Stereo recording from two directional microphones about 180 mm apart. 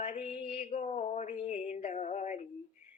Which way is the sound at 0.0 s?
40° left (ahead or behind).